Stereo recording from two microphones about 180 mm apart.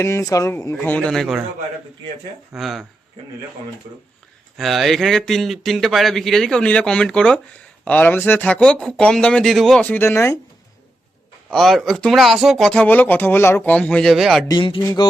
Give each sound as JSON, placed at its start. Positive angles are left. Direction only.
{"t": 0.0, "sound": "speech", "side_deg": 15}
{"t": 2.5, "sound": "speech", "side_deg": 0}
{"t": 4.5, "sound": "speech", "side_deg": 0}
{"t": 11.5, "sound": "speech", "side_deg": 0}
{"t": 14.4, "sound": "speech", "side_deg": 25}